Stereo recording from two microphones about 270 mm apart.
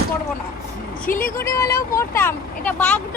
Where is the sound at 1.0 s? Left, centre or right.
Left.